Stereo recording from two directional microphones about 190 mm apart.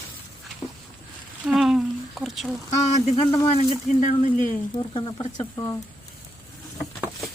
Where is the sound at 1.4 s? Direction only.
5° right (ahead or behind).